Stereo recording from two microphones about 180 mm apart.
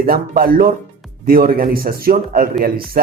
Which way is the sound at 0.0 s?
55° right (ahead or behind).